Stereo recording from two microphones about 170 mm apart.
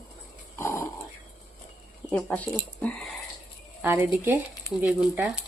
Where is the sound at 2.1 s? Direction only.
10° left (ahead or behind).